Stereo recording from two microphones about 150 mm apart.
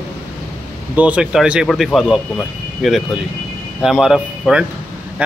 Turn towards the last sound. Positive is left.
turn(degrees=-5)  # may be behind; listen again after turning